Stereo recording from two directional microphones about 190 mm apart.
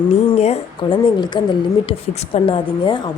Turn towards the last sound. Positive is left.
turn(degrees=25)  # may be behind; listen again after turning